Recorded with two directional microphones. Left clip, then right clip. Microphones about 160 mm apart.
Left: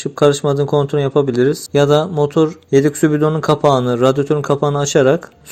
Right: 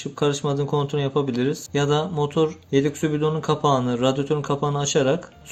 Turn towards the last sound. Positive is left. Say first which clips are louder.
# left 8 dB
turn(degrees=35)  # may be behind; listen again after turning